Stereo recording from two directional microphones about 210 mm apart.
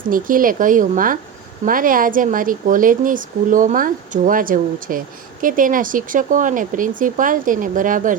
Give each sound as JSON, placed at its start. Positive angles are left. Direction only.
{"t": 0.1, "sound": "speech", "side_deg": -40}